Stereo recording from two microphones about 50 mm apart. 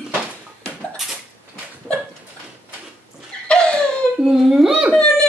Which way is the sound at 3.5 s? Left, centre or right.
Centre.